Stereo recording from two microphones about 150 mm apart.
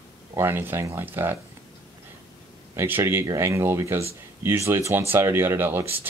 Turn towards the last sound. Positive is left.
turn(degrees=-15)  # may be behind; listen again after turning